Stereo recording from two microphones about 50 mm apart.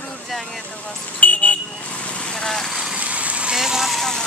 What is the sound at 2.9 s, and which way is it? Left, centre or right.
Vehicle, right.